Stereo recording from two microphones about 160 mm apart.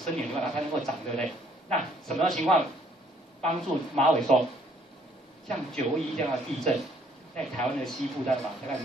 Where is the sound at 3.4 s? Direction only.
45° right (ahead or behind).